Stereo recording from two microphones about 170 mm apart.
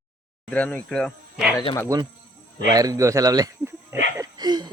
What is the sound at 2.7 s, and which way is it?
Speech, 20° right (ahead or behind).